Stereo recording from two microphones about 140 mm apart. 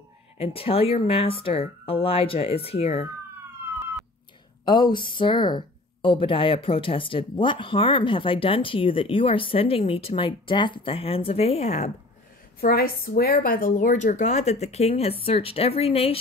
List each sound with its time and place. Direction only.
0.4 s a woman's voice: 45° left (ahead or behind)
4.6 s speech: 30° left (ahead or behind); by 11.9 s 50° left (ahead or behind)
12.5 s a woman's voice: 90° left; by 16.2 s 45° left (ahead or behind)